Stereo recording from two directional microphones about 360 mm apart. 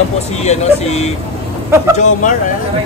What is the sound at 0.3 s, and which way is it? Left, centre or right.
Speech, centre.